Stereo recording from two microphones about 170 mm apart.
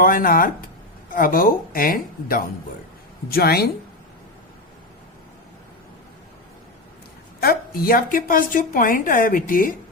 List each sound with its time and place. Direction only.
0.0 s a woman's voice: 55° left (ahead or behind)
7.3 s a woman's voice: 60° left (ahead or behind)